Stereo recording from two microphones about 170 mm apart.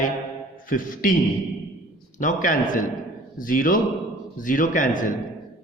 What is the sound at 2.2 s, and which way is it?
A man's voice, 50° left (ahead or behind).